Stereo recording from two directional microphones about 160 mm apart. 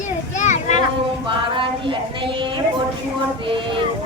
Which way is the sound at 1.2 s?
30° right (ahead or behind).